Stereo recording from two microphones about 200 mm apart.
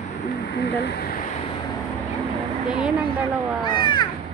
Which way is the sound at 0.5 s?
55° left (ahead or behind).